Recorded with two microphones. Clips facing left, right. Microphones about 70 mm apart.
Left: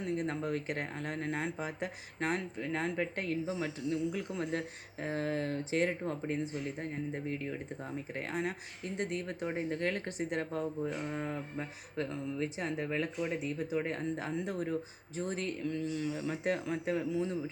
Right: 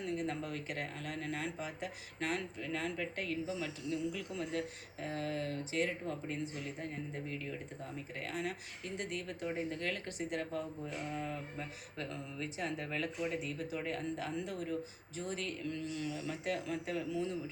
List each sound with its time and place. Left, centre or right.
0.0 s speech: left
15.7 s speech: left